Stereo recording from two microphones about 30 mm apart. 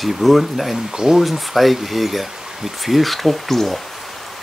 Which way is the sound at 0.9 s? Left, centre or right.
Right.